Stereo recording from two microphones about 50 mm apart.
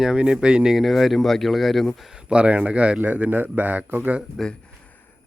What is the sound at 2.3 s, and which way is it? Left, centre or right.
A man's voice, right.